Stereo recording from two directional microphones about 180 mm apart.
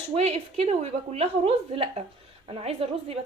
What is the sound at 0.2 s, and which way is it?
A woman's voice, 35° right (ahead or behind).